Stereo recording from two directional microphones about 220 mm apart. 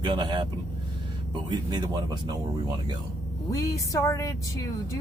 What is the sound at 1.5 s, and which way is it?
Speech, 20° right (ahead or behind).